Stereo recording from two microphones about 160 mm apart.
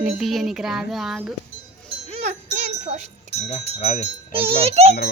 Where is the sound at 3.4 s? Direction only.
45° left (ahead or behind).